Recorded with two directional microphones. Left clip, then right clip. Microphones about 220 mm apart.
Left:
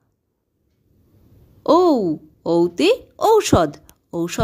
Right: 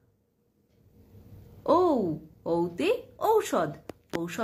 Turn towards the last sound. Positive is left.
turn(degrees=45)  # may be behind; listen again after turning